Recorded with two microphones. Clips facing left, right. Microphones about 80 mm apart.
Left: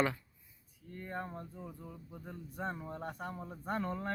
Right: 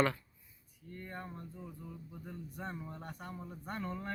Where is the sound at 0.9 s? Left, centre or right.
Left.